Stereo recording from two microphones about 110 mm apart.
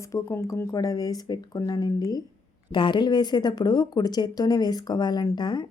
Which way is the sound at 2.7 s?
45° left (ahead or behind).